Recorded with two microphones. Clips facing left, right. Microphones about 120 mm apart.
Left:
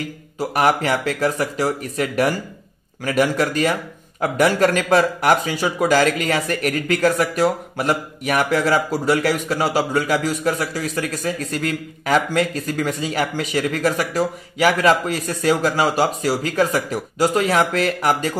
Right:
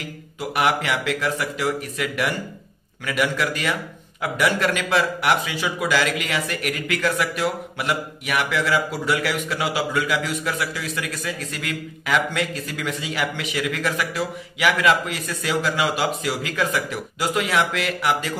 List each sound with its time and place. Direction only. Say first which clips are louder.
0.4 s speech: left 4 dB; 40° left (ahead or behind)